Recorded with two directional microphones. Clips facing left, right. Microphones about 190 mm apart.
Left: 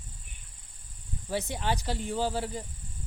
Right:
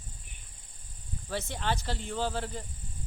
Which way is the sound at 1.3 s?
15° left (ahead or behind).